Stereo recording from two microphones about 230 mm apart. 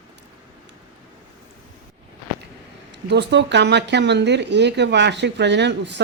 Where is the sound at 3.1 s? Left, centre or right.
Right.